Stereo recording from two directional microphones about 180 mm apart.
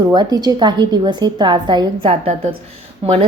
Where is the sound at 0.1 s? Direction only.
20° right (ahead or behind).